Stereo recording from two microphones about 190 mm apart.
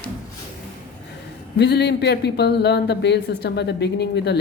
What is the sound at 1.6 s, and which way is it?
Speech, 60° left (ahead or behind).